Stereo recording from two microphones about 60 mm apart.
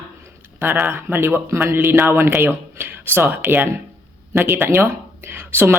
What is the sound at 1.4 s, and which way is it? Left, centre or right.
Speech, right.